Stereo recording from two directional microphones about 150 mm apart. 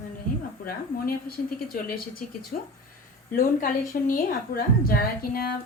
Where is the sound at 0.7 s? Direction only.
80° left.